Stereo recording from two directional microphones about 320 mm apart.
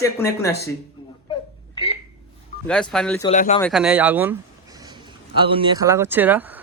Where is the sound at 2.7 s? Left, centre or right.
Centre.